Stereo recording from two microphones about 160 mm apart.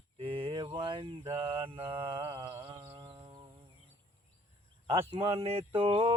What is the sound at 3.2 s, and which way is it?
Music, 25° right (ahead or behind).